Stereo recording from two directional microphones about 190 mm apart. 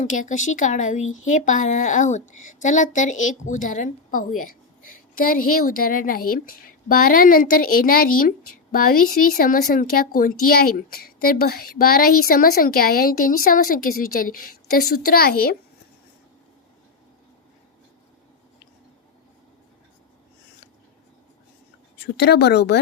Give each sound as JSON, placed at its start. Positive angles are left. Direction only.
{"t": 0.0, "sound": "speech", "side_deg": 40}
{"t": 1.0, "sound": "speech", "side_deg": 90}
{"t": 1.3, "sound": "a woman's voice", "side_deg": 40}
{"t": 21.9, "sound": "speech", "side_deg": 65}